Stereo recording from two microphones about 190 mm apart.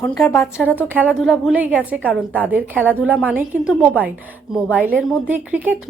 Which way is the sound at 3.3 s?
5° right (ahead or behind).